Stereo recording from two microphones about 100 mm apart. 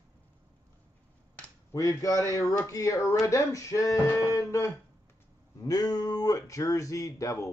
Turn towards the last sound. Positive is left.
turn(degrees=35)  # may be behind; listen again after turning